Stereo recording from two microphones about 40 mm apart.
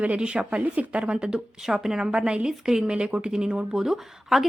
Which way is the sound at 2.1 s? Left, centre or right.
Right.